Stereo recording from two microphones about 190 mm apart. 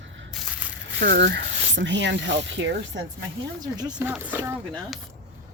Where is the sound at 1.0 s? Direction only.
55° right (ahead or behind).